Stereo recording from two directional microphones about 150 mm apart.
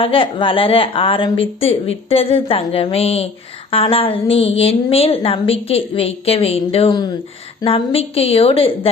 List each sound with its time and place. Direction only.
0.0 s a woman's voice: 35° left (ahead or behind)